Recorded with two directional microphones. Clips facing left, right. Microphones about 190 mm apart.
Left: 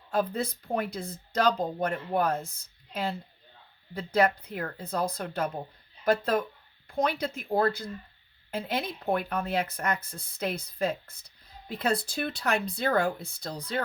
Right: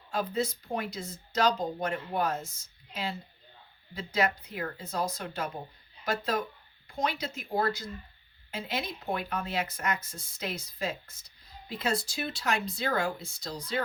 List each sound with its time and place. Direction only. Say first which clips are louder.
0.1 s speech: left 2 dB; 55° left (ahead or behind)